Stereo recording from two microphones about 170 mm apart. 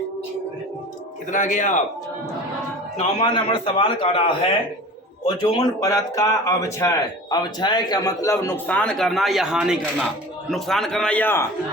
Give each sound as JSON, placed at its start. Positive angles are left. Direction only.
{"t": 1.3, "sound": "a man's voice", "side_deg": 45}
{"t": 3.2, "sound": "a man's voice", "side_deg": 30}